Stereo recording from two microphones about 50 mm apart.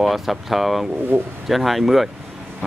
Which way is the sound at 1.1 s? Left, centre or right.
Right.